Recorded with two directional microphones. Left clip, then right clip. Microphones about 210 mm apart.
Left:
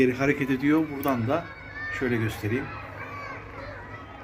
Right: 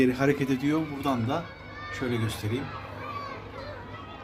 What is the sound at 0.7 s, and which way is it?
Speech, 10° left (ahead or behind).